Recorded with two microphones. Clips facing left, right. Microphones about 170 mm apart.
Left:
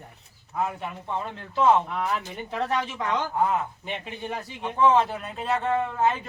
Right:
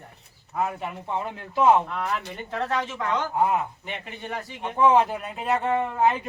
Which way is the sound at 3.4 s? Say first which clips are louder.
Right 1 dB; 10° right (ahead or behind).